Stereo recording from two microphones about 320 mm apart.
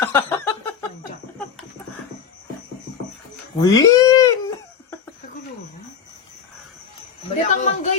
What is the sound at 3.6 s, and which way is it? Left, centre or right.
Speech, centre.